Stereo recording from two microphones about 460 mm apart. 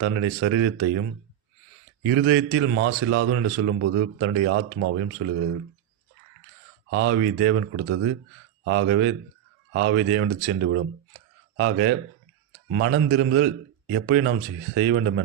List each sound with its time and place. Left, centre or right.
0.0 s speech: right
2.0 s speech: right
6.9 s speech: right
8.6 s speech: right